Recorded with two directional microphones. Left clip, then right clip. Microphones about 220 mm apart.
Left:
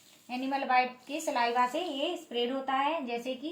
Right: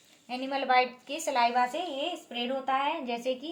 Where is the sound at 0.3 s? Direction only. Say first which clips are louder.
Right 2 dB; 50° right (ahead or behind).